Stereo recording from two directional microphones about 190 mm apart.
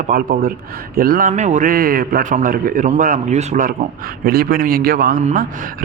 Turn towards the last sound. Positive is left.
turn(degrees=-45)  # may be behind; listen again after turning